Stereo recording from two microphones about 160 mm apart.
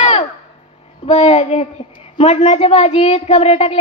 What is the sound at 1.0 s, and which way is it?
A child's voice, 40° left (ahead or behind).